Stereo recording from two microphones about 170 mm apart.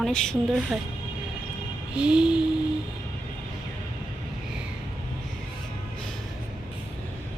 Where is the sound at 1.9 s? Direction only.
5° right (ahead or behind).